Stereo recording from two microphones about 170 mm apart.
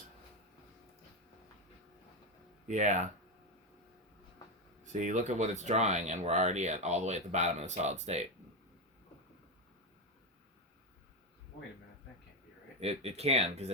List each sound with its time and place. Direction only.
2.6 s speech: 45° right (ahead or behind)
4.8 s speech: 45° right (ahead or behind)
12.8 s speech: 35° right (ahead or behind)